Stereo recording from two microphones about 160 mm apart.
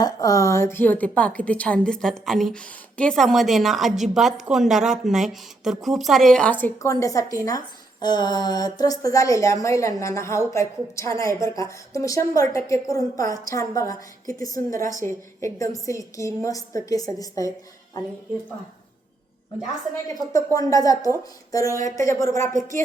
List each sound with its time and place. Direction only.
0.0 s a woman's voice: 20° left (ahead or behind)
20.3 s speech: 20° left (ahead or behind)